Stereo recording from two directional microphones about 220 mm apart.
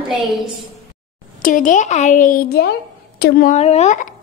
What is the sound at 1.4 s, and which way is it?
A woman's voice, 35° left (ahead or behind).